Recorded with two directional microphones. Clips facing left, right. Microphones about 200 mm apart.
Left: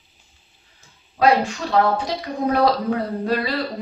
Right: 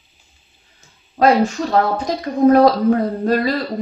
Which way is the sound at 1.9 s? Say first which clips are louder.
Right 4 dB; 45° right (ahead or behind).